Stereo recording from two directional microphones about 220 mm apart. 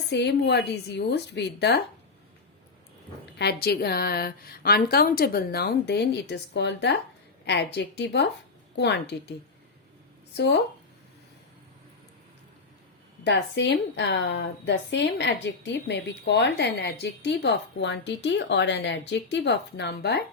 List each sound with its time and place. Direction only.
0.1 s a woman's voice: 50° left (ahead or behind)
3.3 s a woman's voice: 45° left (ahead or behind)
10.3 s a woman's voice: 50° left (ahead or behind)
13.2 s a woman's voice: 55° left (ahead or behind)